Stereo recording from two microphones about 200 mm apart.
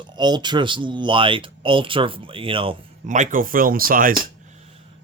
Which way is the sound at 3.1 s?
40° right (ahead or behind).